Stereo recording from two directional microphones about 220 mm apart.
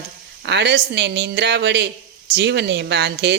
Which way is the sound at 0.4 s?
50° right (ahead or behind).